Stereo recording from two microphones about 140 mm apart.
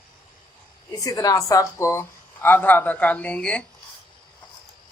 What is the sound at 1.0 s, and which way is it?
A woman's voice, 25° left (ahead or behind).